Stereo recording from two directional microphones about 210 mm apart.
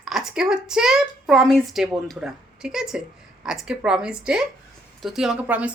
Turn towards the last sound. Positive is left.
turn(degrees=-5)  # may be behind; listen again after turning